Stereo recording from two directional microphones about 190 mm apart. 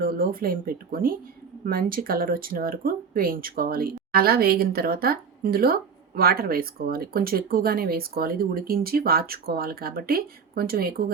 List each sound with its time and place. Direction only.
0.0 s speech: 50° right (ahead or behind)